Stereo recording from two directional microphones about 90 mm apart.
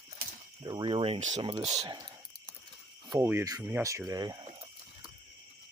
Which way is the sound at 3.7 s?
30° right (ahead or behind).